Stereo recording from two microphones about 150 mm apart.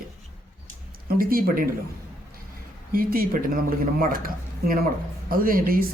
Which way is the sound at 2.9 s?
70° right (ahead or behind).